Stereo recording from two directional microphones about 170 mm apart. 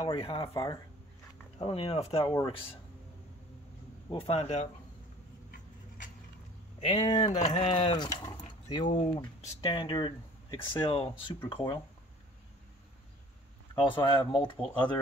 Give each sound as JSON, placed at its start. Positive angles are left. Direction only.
{"t": 0.0, "sound": "speech", "side_deg": 35}
{"t": 0.5, "sound": "speech", "side_deg": 20}
{"t": 1.6, "sound": "speech", "side_deg": 35}
{"t": 4.1, "sound": "speech", "side_deg": 35}
{"t": 6.8, "sound": "speech", "side_deg": 35}
{"t": 8.2, "sound": "a sound", "side_deg": 20}
{"t": 8.8, "sound": "speech", "side_deg": 45}
{"t": 9.1, "sound": "speech", "side_deg": 25}
{"t": 13.7, "sound": "speech", "side_deg": 30}